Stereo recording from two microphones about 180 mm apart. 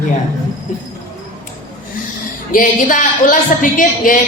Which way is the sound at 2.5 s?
45° left (ahead or behind).